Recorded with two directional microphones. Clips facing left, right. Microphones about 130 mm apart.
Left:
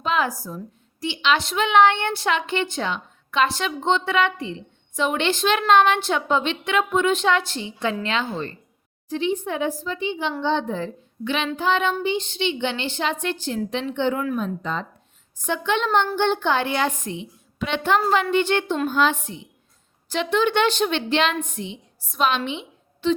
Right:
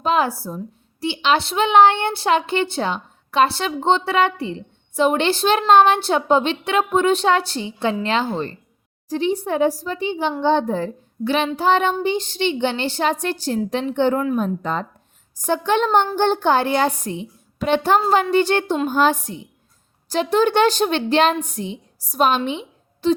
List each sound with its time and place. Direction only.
0.0 s a woman's voice: 35° right (ahead or behind)